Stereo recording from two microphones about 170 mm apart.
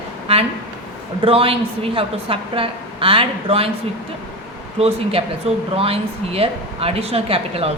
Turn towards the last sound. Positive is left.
turn(degrees=-35)  # may be behind; listen again after turning